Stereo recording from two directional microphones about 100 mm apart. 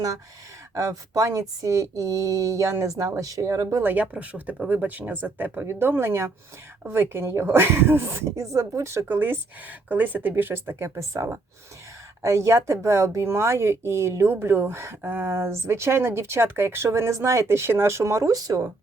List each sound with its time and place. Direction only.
0.7 s speech: 30° right (ahead or behind)
3.8 s speech: 15° right (ahead or behind); by 18.7 s 35° right (ahead or behind)